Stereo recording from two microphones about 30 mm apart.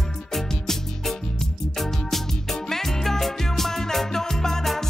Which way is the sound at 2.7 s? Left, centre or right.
Centre.